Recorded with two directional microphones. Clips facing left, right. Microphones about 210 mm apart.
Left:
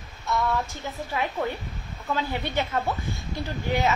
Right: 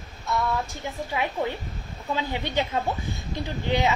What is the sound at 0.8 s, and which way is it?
A woman's voice, 15° right (ahead or behind).